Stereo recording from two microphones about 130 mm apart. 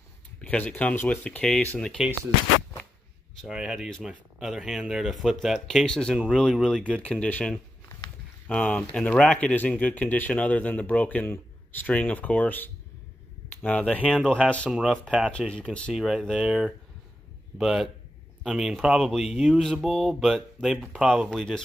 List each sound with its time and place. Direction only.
0.4 s speech: 10° left (ahead or behind)
3.3 s speech: 5° right (ahead or behind)
15.9 s speech: 5° right (ahead or behind)